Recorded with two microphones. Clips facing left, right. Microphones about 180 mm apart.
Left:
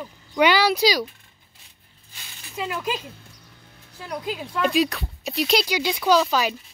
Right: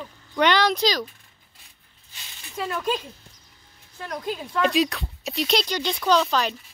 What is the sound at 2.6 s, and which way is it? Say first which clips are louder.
Speech: right 1 dB; 10° left (ahead or behind).